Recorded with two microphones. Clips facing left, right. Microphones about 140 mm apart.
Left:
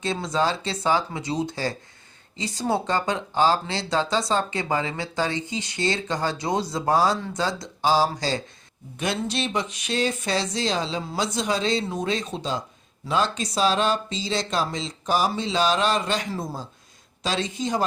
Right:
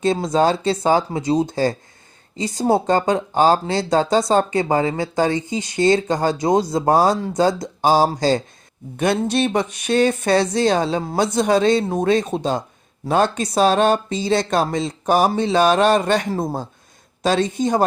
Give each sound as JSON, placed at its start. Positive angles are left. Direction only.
{"t": 0.0, "sound": "speech", "side_deg": -45}